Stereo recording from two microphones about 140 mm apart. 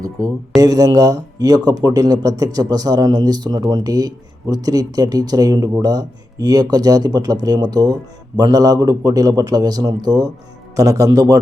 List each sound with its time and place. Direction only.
0.2 s speech: 25° right (ahead or behind)